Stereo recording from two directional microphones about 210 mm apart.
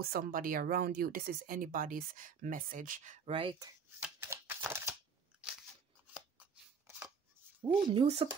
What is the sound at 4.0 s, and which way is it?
Shuffling cards, 10° right (ahead or behind).